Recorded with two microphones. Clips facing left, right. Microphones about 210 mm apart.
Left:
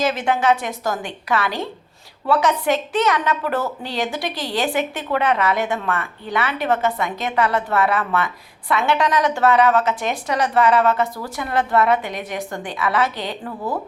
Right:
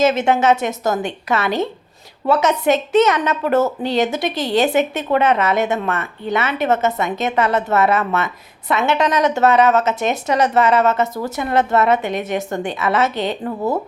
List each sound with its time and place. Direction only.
0.0 s a woman's voice: 25° right (ahead or behind)